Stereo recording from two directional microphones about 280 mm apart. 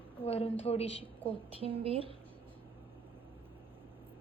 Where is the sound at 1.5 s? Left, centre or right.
Centre.